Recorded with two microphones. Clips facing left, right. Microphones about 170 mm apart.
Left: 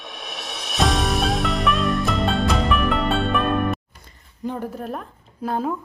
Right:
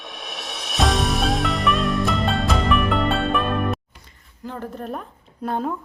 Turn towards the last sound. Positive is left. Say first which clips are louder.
# left 1 dB
turn(degrees=0)  # may be behind; listen again after turning